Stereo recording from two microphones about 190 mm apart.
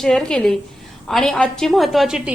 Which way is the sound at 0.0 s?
5° left (ahead or behind).